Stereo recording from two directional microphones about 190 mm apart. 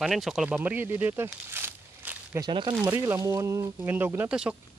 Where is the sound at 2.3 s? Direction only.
25° right (ahead or behind); by 4.6 s 5° right (ahead or behind).